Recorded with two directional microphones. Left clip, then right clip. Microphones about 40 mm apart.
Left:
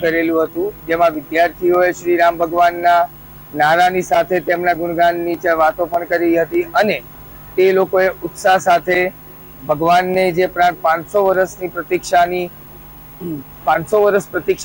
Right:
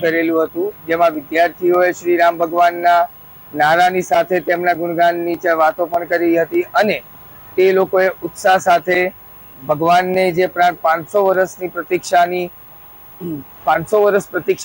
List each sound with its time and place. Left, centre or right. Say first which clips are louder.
0.0 s a man's voice: even; left